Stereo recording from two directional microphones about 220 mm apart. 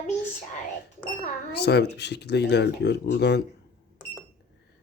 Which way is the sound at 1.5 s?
50° left (ahead or behind).